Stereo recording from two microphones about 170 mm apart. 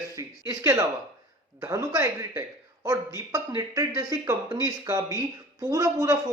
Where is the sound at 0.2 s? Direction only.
20° right (ahead or behind).